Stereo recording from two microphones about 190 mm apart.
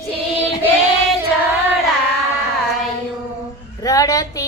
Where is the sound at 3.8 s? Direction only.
20° left (ahead or behind).